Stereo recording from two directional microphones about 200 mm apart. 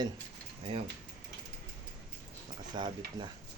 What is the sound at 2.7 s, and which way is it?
Speech, 25° right (ahead or behind).